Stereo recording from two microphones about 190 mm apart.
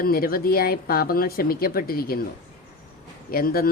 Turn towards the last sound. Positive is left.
turn(degrees=50)  # may be behind; listen again after turning